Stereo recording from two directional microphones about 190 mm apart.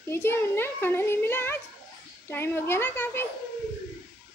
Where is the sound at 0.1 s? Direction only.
10° left (ahead or behind).